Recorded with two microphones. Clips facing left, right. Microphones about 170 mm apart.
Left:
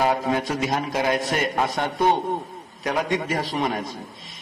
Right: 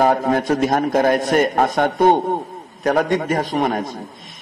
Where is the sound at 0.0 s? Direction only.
50° right (ahead or behind).